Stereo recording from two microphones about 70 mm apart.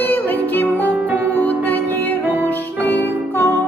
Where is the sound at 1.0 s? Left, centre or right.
Right.